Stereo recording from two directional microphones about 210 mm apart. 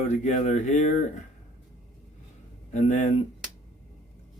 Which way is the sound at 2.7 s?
35° left (ahead or behind).